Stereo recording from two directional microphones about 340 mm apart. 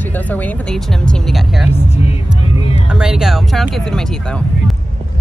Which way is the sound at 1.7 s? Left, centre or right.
Centre.